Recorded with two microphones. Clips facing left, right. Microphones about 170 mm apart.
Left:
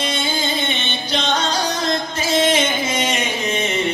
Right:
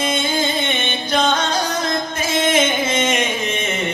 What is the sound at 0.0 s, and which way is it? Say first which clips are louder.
Music: right 3 dB; 50° right (ahead or behind).